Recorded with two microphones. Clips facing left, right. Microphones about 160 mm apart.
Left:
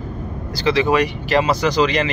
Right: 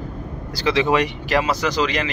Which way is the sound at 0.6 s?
20° right (ahead or behind).